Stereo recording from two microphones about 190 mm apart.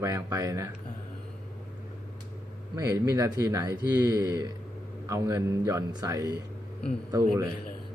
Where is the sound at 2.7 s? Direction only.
15° right (ahead or behind).